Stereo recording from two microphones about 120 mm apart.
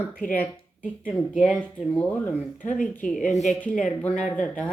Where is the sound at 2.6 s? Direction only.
90° left.